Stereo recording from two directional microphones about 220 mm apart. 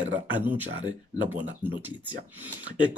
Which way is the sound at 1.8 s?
10° right (ahead or behind).